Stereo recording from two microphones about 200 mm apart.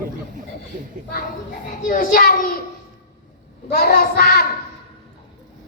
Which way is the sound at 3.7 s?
50° left (ahead or behind).